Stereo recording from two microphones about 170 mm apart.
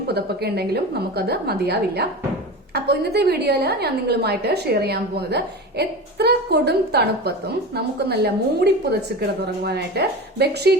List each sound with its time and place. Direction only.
0.1 s a woman's voice: 70° right (ahead or behind)